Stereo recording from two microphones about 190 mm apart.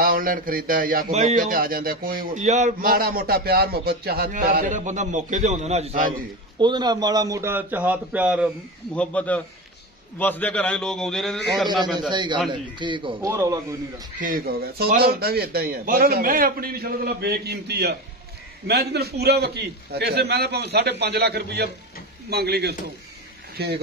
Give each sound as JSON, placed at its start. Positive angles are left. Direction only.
{"t": 0.0, "sound": "a man's voice", "side_deg": -50}
{"t": 6.6, "sound": "a man's voice", "side_deg": -25}
{"t": 8.9, "sound": "a man's voice", "side_deg": 5}
{"t": 11.6, "sound": "a man's voice", "side_deg": -25}
{"t": 14.2, "sound": "a man's voice", "side_deg": -50}